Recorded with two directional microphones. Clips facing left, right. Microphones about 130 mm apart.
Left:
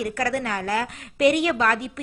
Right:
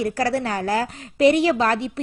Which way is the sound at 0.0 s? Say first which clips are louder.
Right 3 dB; 30° right (ahead or behind).